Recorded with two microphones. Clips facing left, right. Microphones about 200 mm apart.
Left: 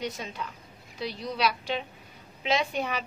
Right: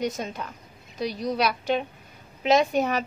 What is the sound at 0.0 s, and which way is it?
A woman's voice, 45° right (ahead or behind).